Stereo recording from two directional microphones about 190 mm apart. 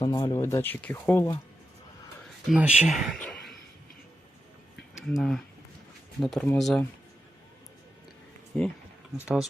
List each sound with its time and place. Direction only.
0.0 s speech: 20° left (ahead or behind)
2.5 s speech: 5° right (ahead or behind)
3.2 s a sound: centre (ahead or behind)
4.9 s speech: centre (ahead or behind)
9.2 s speech: 5° right (ahead or behind)